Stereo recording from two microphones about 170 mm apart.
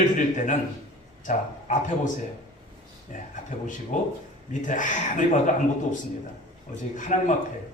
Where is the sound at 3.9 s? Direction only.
45° left (ahead or behind).